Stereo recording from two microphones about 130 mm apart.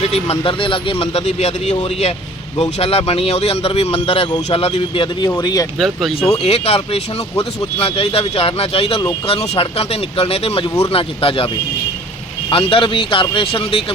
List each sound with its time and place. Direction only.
0.0 s speech: 50° left (ahead or behind)
5.4 s speech: 30° left (ahead or behind)
5.8 s speech: centre (ahead or behind)
6.1 s speech: 50° left (ahead or behind)